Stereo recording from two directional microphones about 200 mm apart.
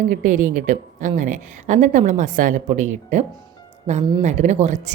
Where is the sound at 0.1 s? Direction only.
40° right (ahead or behind).